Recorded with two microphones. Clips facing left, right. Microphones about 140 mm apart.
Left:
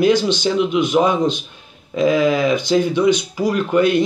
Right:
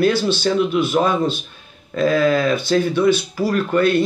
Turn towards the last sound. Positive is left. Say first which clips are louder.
# left 1 dB
turn(degrees=15)  # may be behind; listen again after turning